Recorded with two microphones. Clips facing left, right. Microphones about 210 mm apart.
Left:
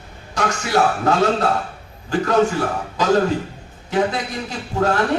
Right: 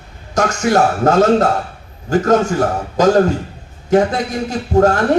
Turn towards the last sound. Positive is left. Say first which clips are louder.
# right 6 dB
turn(degrees=-45)  # may be behind; listen again after turning